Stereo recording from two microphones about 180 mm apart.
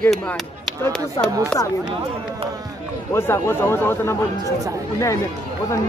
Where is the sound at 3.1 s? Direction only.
15° left (ahead or behind).